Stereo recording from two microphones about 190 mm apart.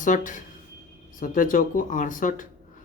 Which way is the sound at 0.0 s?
45° left (ahead or behind).